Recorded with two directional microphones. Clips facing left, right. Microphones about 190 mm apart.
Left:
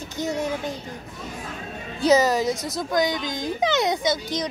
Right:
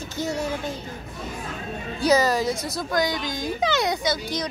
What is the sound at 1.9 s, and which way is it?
A child's voice, 20° left (ahead or behind).